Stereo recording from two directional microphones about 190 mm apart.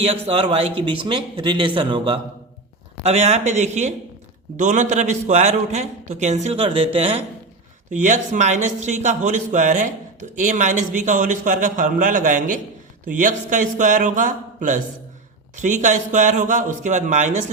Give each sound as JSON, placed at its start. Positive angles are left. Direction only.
{"t": 0.0, "sound": "a man's voice", "side_deg": -30}
{"t": 3.0, "sound": "a man's voice", "side_deg": -35}
{"t": 7.9, "sound": "a man's voice", "side_deg": -40}